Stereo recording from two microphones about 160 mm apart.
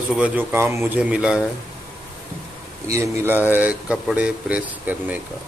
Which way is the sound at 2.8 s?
20° right (ahead or behind).